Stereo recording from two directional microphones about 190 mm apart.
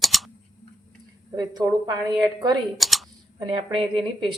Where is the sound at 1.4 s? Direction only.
20° right (ahead or behind).